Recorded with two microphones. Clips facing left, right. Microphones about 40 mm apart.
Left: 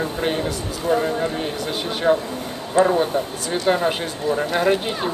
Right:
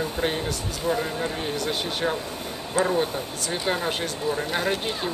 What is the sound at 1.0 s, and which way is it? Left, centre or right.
A man's voice, centre.